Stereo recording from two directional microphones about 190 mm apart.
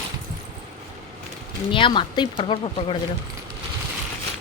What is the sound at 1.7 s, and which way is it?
Speech, 25° left (ahead or behind).